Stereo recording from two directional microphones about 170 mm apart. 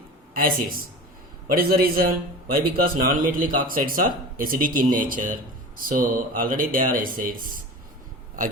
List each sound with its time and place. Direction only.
0.3 s speech: 60° right (ahead or behind)